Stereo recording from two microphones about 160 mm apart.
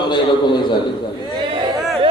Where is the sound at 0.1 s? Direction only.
25° left (ahead or behind).